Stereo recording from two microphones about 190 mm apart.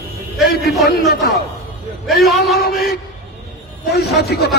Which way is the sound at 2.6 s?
55° left (ahead or behind).